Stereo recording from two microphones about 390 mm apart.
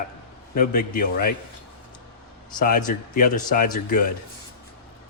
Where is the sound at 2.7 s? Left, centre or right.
Left.